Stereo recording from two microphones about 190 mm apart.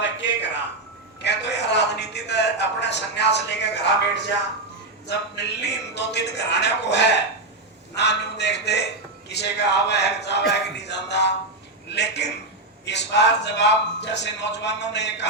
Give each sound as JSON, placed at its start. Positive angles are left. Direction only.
{"t": 1.2, "sound": "a man's voice", "side_deg": 65}